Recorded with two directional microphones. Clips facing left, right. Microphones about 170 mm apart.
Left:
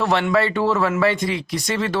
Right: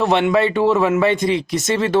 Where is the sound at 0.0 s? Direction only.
20° right (ahead or behind).